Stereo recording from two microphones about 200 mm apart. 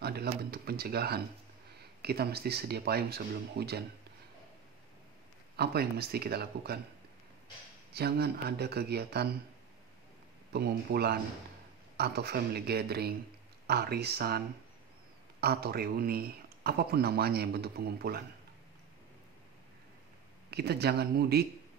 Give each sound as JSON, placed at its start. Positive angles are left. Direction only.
{"t": 0.0, "sound": "a man's voice", "side_deg": -55}
{"t": 5.6, "sound": "a man's voice", "side_deg": -50}
{"t": 7.9, "sound": "a man's voice", "side_deg": -50}
{"t": 10.5, "sound": "a man's voice", "side_deg": -55}
{"t": 15.4, "sound": "a man's voice", "side_deg": -50}
{"t": 20.4, "sound": "a man's voice", "side_deg": -55}